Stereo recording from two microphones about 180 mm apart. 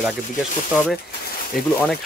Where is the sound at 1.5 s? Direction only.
55° left (ahead or behind).